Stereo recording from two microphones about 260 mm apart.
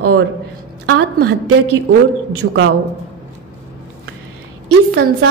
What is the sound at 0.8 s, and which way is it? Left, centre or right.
Speech, right.